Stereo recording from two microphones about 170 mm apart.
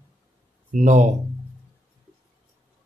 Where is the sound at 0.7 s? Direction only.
45° right (ahead or behind).